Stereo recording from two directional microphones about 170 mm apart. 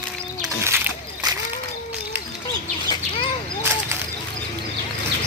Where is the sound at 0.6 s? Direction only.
15° right (ahead or behind).